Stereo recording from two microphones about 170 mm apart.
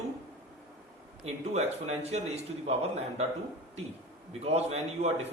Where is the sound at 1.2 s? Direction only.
40° right (ahead or behind).